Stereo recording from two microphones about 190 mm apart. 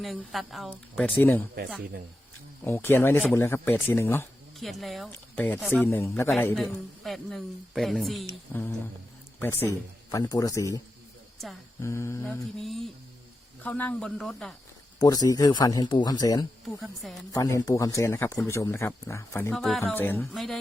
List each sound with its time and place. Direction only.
0.0 s speech: centre (ahead or behind)
1.0 s speech: 10° left (ahead or behind)
2.6 s speech: 10° left (ahead or behind)
4.6 s speech: centre (ahead or behind)
5.8 s speech: 15° left (ahead or behind)
6.6 s speech: centre (ahead or behind)
8.5 s speech: 10° left (ahead or behind)
11.8 s speech: 15° left (ahead or behind)
12.5 s speech: centre (ahead or behind)
14.9 s speech: 20° left (ahead or behind)
16.8 s speech: centre (ahead or behind)
17.3 s speech: 15° left (ahead or behind); by 20.6 s centre (ahead or behind)